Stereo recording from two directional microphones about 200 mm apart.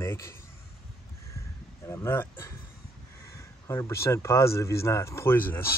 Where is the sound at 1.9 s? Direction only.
10° left (ahead or behind).